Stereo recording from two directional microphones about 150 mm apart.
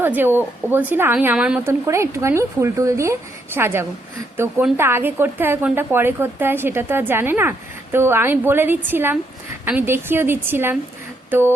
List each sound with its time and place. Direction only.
0.0 s a woman's voice: 15° right (ahead or behind)